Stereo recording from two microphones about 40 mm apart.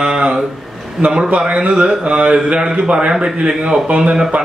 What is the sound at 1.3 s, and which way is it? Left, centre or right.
Speech, right.